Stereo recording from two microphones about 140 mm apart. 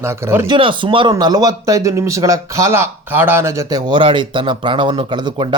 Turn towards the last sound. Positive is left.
turn(degrees=-35)  # may be behind; listen again after turning